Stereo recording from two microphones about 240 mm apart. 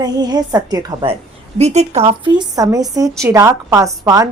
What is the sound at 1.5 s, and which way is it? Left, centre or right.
A woman's voice, right.